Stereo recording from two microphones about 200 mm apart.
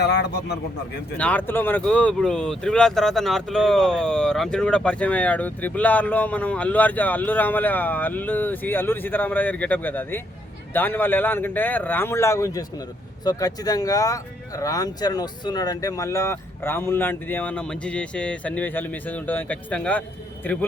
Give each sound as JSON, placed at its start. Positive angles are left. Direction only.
{"t": 0.0, "sound": "a man's voice", "side_deg": 55}
{"t": 1.1, "sound": "speech", "side_deg": 10}